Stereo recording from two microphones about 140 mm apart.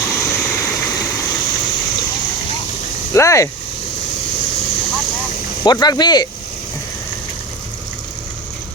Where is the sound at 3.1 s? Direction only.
20° left (ahead or behind).